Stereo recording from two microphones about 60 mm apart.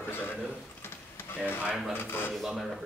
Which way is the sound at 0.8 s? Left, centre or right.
Left.